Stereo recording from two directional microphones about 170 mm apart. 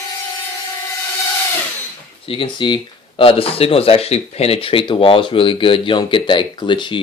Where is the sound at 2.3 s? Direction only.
30° left (ahead or behind).